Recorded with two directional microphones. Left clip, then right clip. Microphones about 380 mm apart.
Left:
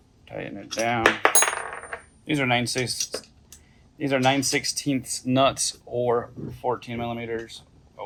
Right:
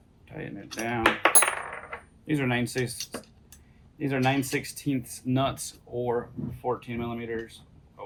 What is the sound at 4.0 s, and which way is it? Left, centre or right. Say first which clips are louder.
Speech: left 5 dB; left.